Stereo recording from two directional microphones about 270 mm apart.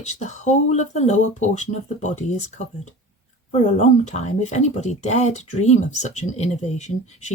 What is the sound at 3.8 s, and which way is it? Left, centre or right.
Speech, left.